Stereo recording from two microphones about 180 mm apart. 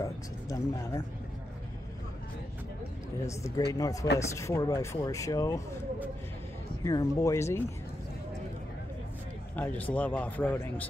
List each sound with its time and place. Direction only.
0.0 s vehicle: 20° left (ahead or behind)
3.3 s a man's voice: 15° left (ahead or behind)
6.8 s a man's voice: 20° left (ahead or behind)
9.6 s a man's voice: 10° left (ahead or behind)